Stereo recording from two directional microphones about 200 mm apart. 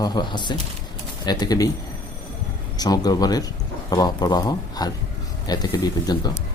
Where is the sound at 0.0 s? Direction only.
20° left (ahead or behind).